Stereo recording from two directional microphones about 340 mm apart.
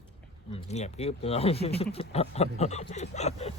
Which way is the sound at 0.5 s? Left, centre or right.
Centre.